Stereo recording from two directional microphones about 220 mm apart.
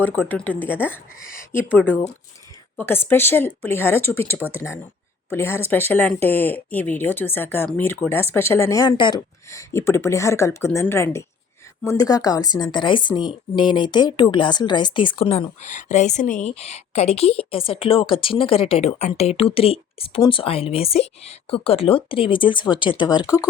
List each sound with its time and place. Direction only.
0.0 s speech: 10° left (ahead or behind)